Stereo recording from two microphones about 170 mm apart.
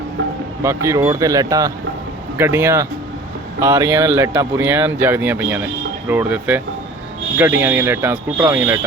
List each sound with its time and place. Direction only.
0.6 s speech: 15° right (ahead or behind)